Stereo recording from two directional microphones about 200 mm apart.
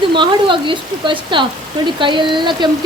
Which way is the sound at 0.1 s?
25° right (ahead or behind).